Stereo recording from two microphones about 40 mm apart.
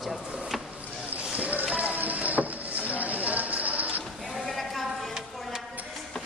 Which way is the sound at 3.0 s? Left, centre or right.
Right.